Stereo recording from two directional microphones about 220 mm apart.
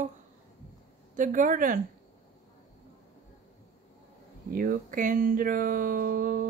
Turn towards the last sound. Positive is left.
turn(degrees=-40)  # may be behind; listen again after turning